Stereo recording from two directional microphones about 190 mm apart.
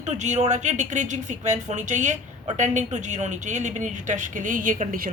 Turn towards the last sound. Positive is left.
turn(degrees=-45)  # may be behind; listen again after turning